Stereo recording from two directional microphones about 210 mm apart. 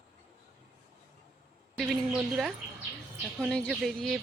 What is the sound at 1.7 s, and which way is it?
Speech, centre (ahead or behind).